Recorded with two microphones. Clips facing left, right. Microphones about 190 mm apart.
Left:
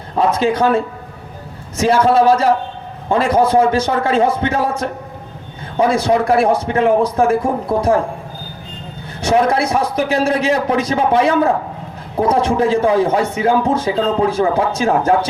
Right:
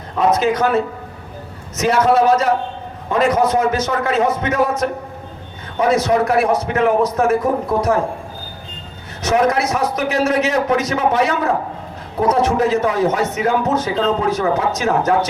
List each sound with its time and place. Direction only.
0.2 s a man's voice: 30° left (ahead or behind)
5.9 s a man's voice: 30° left (ahead or behind)
9.2 s a man's voice: 30° left (ahead or behind)